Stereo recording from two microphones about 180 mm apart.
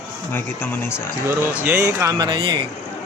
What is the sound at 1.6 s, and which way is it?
Speech, 15° right (ahead or behind).